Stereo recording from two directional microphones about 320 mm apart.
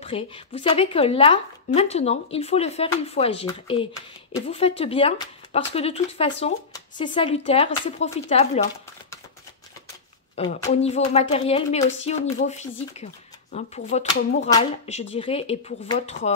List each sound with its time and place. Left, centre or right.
0.0 s a woman's voice: centre
10.3 s a woman's voice: centre